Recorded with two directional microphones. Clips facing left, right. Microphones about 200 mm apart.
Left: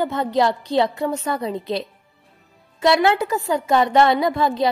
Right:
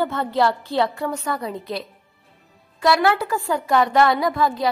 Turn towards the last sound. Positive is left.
turn(degrees=25)  # may be behind; listen again after turning